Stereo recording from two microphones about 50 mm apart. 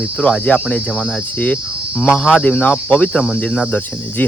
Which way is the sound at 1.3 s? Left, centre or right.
Left.